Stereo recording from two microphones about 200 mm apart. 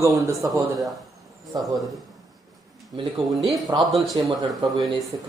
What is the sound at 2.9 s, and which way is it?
Speech, 25° right (ahead or behind).